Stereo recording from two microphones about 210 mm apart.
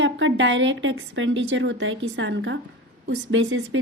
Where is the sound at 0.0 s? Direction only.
60° right (ahead or behind).